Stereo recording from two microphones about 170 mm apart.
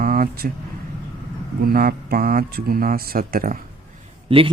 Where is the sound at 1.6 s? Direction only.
60° right (ahead or behind).